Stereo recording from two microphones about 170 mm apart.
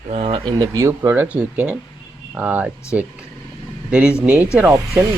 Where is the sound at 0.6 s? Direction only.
15° right (ahead or behind).